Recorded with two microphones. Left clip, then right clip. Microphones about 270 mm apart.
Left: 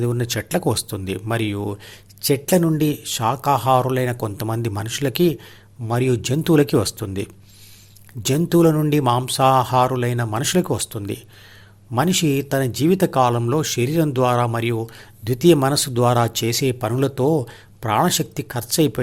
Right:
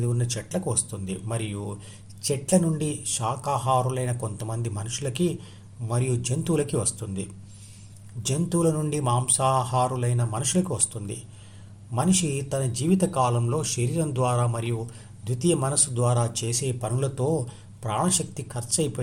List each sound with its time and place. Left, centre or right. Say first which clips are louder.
0.0 s speech: left 8 dB; left